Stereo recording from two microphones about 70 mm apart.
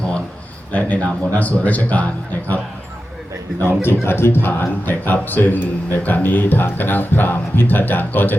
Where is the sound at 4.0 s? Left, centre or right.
Left.